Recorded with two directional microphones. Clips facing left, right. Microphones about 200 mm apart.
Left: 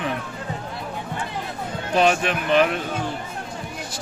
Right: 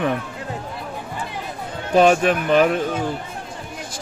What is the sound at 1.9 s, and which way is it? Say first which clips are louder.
Speech: right 5 dB; 45° right (ahead or behind).